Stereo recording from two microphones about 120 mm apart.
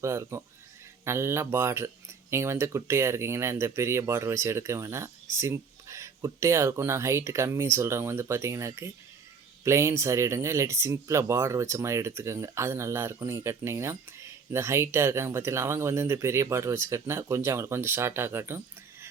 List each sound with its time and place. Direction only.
0.0 s speech: 25° right (ahead or behind)